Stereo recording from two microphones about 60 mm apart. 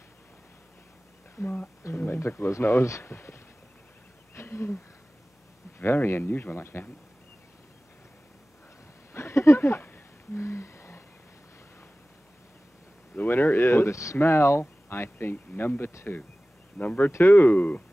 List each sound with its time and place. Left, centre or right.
1.4 s speech: left
2.1 s speech: left
4.4 s a sound: left
5.8 s speech: left
9.1 s a sound: left
10.3 s humming: left
13.1 s speech: left
15.3 s speech: left
15.9 s speech: left
16.7 s speech: left
17.1 s speech: left